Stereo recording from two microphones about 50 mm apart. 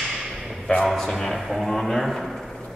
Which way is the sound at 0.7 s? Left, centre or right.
Centre.